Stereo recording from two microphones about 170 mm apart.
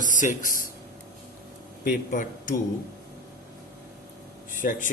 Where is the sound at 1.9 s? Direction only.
50° left (ahead or behind).